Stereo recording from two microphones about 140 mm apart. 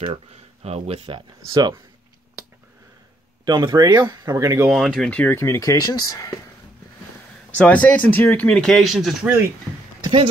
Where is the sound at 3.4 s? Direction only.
30° right (ahead or behind).